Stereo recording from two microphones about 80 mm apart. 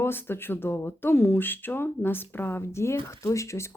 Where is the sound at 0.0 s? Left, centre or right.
Left.